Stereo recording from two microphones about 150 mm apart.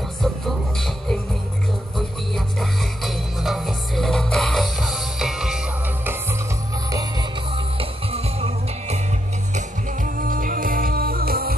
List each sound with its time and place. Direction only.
0.2 s music: centre (ahead or behind)
6.9 s music: 25° right (ahead or behind)
7.5 s music: 35° right (ahead or behind)
9.5 s music: 55° right (ahead or behind); by 11.5 s 85° right